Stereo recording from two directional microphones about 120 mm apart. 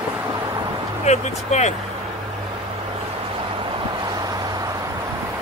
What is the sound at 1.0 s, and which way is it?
Speech, 70° left (ahead or behind).